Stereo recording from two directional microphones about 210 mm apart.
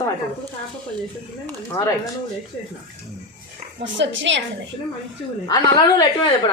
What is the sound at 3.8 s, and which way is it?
Speech, 60° right (ahead or behind).